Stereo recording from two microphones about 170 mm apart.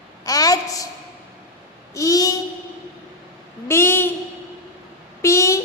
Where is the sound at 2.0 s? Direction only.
20° left (ahead or behind).